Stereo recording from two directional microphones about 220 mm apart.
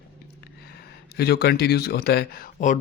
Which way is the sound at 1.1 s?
45° left (ahead or behind).